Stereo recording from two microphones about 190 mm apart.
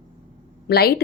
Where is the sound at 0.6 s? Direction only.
55° left (ahead or behind).